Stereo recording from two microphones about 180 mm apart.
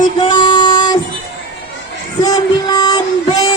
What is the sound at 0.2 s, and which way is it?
Music, 25° left (ahead or behind).